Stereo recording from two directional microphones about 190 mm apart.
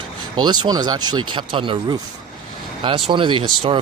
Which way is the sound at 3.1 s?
25° right (ahead or behind).